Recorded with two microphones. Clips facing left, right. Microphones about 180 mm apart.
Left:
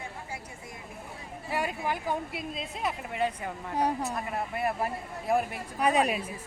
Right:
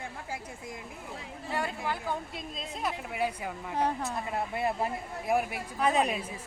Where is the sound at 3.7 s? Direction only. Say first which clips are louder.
Left 2 dB; 15° left (ahead or behind).